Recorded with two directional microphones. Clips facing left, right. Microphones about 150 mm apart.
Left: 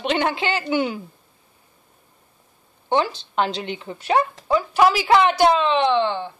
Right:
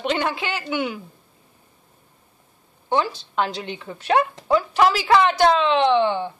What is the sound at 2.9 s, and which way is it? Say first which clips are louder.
A woman's voice: left 1 dB; 25° left (ahead or behind).